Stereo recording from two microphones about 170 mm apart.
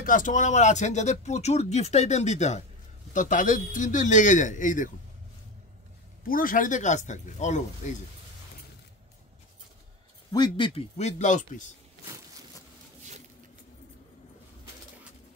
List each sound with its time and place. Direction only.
0.0 s speech: 50° left (ahead or behind)
6.2 s speech: 55° left (ahead or behind)
10.3 s speech: 25° left (ahead or behind); by 11.6 s 45° left (ahead or behind)